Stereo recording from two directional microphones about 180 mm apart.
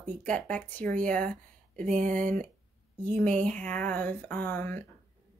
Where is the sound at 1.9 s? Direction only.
45° right (ahead or behind).